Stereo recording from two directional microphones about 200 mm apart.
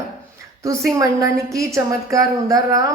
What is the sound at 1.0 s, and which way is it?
A woman's voice, 15° right (ahead or behind).